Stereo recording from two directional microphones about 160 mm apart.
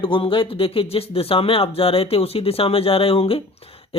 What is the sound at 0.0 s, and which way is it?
Speech, 35° left (ahead or behind).